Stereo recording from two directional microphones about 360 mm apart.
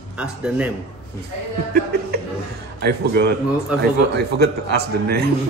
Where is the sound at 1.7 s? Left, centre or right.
Right.